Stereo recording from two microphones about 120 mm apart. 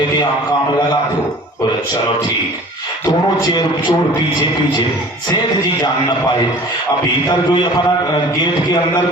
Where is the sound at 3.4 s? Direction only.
35° left (ahead or behind).